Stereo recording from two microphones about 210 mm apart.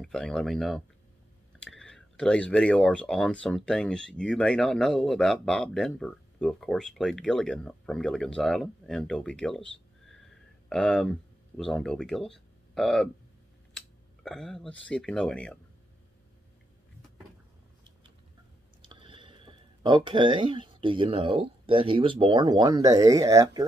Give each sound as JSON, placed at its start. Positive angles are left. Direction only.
{"t": 0.0, "sound": "speech", "side_deg": 0}
{"t": 18.8, "sound": "speech", "side_deg": -25}